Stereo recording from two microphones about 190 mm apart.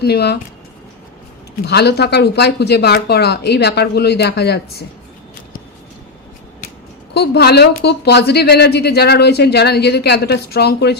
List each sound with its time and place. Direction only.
0.0 s a woman's voice: 60° left (ahead or behind)
1.6 s a woman's voice: 60° left (ahead or behind)
7.1 s a woman's voice: 60° left (ahead or behind)